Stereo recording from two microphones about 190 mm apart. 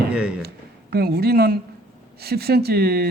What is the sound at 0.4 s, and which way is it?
Speech, 55° right (ahead or behind).